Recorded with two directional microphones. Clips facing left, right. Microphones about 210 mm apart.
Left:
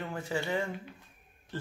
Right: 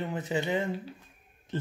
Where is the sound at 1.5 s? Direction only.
20° right (ahead or behind).